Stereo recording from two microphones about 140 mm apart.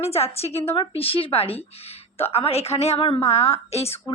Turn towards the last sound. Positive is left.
turn(degrees=45)  # may be behind; listen again after turning